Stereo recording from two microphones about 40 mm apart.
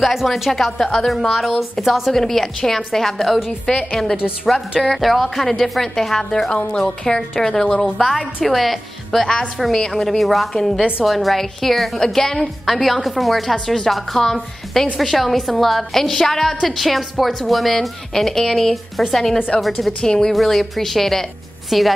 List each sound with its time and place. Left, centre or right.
0.0 s a woman's voice: centre
0.5 s a woman's voice: centre
8.5 s a woman's voice: centre
10.5 s a woman's voice: centre
20.0 s a woman's voice: centre
20.3 s a woman's voice: centre